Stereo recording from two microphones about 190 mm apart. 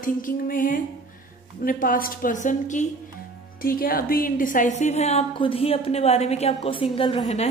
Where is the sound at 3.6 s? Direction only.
50° left (ahead or behind).